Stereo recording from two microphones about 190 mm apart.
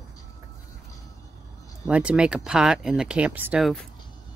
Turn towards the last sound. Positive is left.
turn(degrees=0)  # may be behind; listen again after turning